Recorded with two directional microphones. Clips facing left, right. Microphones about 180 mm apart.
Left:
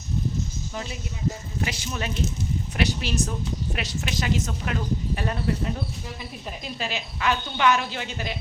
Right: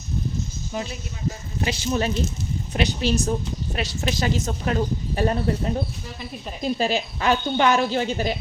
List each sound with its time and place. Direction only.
1.6 s a woman's voice: 30° right (ahead or behind)